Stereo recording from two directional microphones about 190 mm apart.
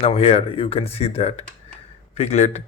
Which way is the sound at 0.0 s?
30° left (ahead or behind).